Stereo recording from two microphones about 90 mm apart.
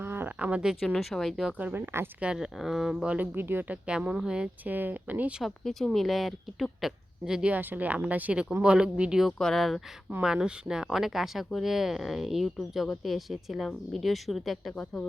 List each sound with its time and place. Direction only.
0.0 s a sound: 25° right (ahead or behind); by 0.9 s 5° right (ahead or behind)
0.9 s speech: centre (ahead or behind)
1.5 s speech: 15° right (ahead or behind)
2.2 s speech: 5° right (ahead or behind)
3.2 s speech: 25° right (ahead or behind)
5.4 s speech: 5° left (ahead or behind)
10.1 s speech: 10° right (ahead or behind)